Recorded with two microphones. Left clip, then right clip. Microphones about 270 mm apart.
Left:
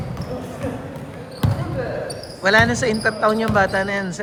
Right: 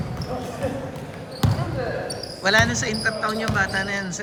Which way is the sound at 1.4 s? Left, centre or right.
Centre.